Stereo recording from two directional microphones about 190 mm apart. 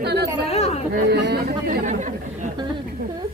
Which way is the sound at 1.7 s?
45° right (ahead or behind).